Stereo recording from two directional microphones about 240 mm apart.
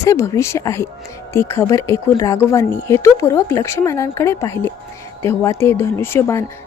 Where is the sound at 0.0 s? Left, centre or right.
Centre.